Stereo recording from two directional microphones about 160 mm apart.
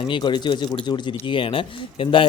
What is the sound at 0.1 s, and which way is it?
Speech, 30° left (ahead or behind).